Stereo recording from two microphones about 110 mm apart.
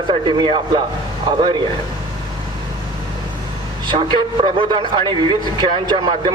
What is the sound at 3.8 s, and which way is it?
A man's voice, 50° right (ahead or behind).